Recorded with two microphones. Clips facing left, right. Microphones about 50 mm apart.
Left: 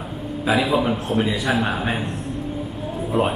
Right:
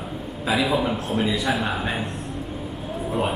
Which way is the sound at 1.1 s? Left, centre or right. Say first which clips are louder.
Left 2 dB; centre.